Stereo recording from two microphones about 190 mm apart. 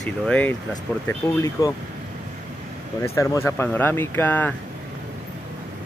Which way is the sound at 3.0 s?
15° left (ahead or behind).